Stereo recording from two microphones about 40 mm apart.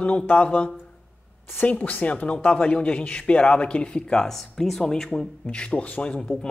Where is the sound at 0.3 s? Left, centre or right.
Left.